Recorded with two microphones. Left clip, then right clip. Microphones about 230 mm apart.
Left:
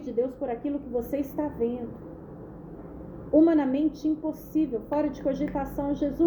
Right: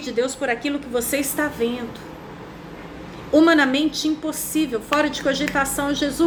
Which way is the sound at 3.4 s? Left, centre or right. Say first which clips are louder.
Right 6 dB; centre.